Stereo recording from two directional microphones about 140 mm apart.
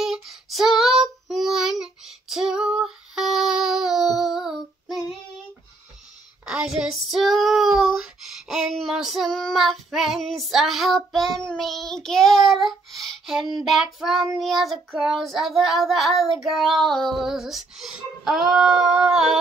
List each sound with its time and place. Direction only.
0.0 s child singing: centre (ahead or behind)
6.4 s child singing: 5° right (ahead or behind)